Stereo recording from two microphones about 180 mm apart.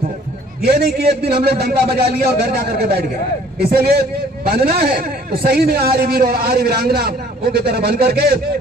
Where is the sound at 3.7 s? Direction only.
60° right (ahead or behind).